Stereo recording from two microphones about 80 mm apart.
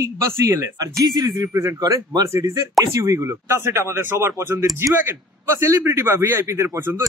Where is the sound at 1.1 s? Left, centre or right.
Right.